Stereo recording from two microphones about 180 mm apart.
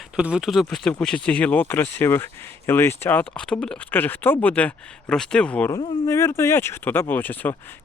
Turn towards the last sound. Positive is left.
turn(degrees=10)  # may be behind; listen again after turning